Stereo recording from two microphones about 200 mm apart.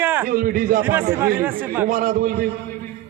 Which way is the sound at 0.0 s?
10° right (ahead or behind).